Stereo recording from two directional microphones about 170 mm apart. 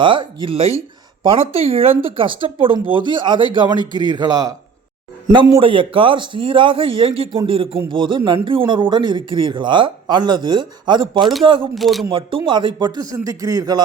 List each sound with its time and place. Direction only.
0.0 s a man's voice: 30° right (ahead or behind)
11.2 s a man's voice: centre (ahead or behind)
11.4 s speech: 30° right (ahead or behind)
11.7 s a man's voice: centre (ahead or behind)
12.0 s a man's voice: 30° right (ahead or behind)